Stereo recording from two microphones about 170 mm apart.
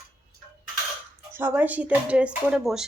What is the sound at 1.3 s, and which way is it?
Speech, 10° right (ahead or behind).